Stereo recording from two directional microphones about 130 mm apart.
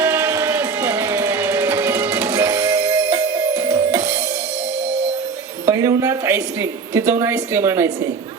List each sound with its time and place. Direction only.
0.0 s music: 20° right (ahead or behind)
5.6 s a woman's voice: 25° right (ahead or behind)